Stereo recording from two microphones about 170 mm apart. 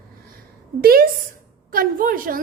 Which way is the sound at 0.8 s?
60° right (ahead or behind).